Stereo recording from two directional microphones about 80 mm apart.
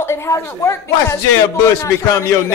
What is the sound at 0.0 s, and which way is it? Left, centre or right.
Speech, left.